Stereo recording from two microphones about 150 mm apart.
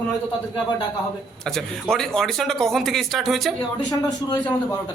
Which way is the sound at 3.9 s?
30° left (ahead or behind).